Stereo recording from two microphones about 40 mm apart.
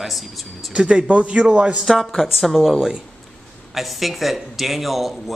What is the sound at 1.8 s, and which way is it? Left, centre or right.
Speech, centre.